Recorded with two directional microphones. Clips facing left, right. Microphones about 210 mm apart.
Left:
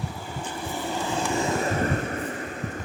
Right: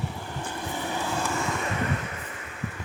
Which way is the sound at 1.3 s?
25° left (ahead or behind).